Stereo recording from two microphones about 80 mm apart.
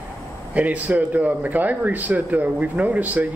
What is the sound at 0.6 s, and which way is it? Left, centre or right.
Speech, centre.